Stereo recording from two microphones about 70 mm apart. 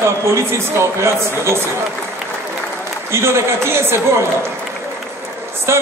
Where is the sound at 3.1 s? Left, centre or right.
Right.